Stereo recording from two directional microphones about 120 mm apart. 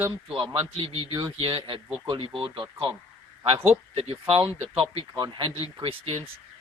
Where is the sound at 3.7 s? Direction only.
50° right (ahead or behind).